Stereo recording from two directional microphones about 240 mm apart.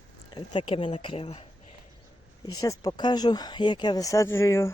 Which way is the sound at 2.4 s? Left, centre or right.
Centre.